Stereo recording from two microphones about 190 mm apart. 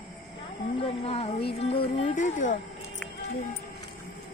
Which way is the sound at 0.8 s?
30° left (ahead or behind).